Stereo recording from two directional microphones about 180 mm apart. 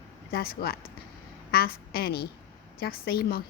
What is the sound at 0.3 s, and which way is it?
A woman's voice, 60° left (ahead or behind).